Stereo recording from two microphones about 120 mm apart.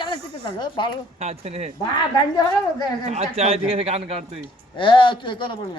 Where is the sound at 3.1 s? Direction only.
60° right (ahead or behind).